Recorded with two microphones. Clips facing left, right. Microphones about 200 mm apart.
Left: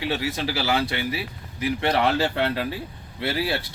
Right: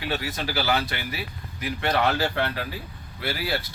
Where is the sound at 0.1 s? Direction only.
25° left (ahead or behind).